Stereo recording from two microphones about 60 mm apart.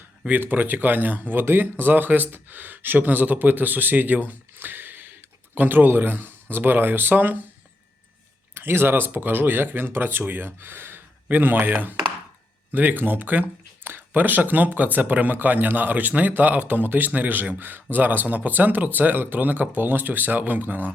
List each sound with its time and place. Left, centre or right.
0.3 s speech: right
8.5 s a man's voice: right